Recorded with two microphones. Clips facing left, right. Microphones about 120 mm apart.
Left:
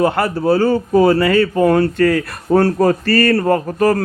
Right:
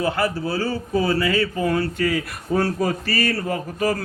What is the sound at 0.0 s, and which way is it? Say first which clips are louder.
A man's voice: left 7 dB; 60° left (ahead or behind).